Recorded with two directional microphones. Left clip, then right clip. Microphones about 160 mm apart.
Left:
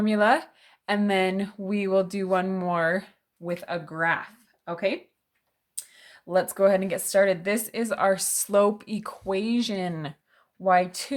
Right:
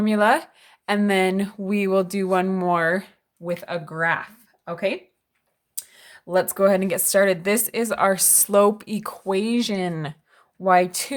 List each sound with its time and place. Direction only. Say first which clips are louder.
0.0 s speech: right 3 dB; 20° right (ahead or behind)